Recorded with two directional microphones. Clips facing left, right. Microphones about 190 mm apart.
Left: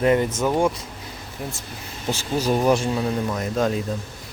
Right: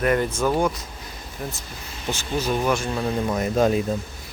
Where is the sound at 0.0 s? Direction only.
20° left (ahead or behind).